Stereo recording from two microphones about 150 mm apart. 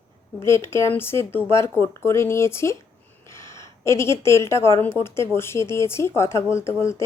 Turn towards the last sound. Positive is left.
turn(degrees=20)  # may be behind; listen again after turning